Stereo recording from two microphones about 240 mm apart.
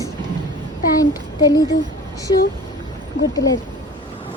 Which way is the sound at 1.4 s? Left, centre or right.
Centre.